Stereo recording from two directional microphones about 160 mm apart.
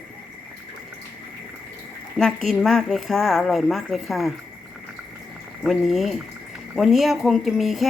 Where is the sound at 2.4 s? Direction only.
Centre (ahead or behind).